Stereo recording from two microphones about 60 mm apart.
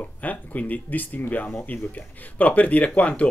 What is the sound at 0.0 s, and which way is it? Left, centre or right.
Speech, left.